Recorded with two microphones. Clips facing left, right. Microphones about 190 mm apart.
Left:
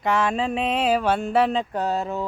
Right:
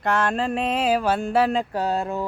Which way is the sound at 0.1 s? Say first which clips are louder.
Even; 5° left (ahead or behind).